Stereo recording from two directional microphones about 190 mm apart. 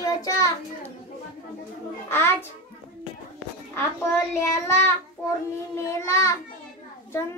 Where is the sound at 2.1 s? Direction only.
10° left (ahead or behind).